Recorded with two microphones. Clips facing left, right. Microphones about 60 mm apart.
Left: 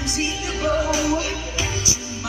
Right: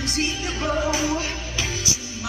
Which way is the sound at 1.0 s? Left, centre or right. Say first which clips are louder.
Left 3 dB; centre.